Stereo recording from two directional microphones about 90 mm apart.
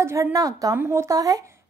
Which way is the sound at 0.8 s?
30° right (ahead or behind).